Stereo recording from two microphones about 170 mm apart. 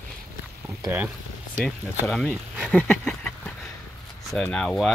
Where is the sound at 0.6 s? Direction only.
15° right (ahead or behind).